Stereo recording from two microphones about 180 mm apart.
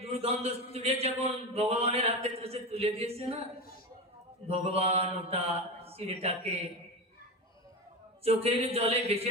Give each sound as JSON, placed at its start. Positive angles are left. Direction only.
{"t": 0.0, "sound": "a man's voice", "side_deg": -35}
{"t": 4.4, "sound": "a man's voice", "side_deg": -35}
{"t": 8.2, "sound": "a man's voice", "side_deg": -35}